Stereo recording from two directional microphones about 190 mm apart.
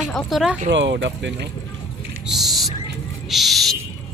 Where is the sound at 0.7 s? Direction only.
70° right (ahead or behind).